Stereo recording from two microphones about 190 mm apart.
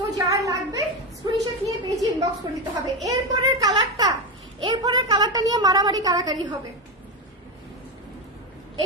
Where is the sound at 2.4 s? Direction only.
25° right (ahead or behind).